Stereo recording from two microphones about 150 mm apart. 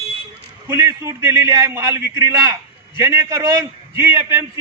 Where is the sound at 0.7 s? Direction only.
20° right (ahead or behind).